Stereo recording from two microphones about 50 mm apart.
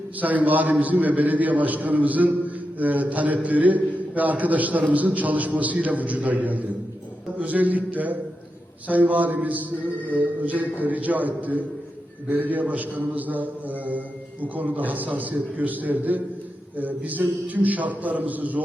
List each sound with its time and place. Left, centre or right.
0.2 s a man's voice: right